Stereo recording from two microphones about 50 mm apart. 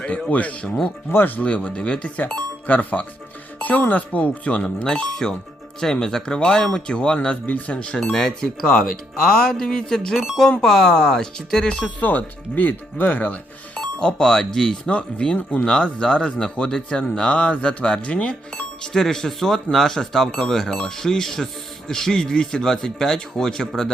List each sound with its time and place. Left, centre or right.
0.3 s speech: left
4.8 s speech: centre
7.4 s speech: left
8.1 s speech: centre; by 13.4 s left
13.7 s speech: centre
18.9 s speech: centre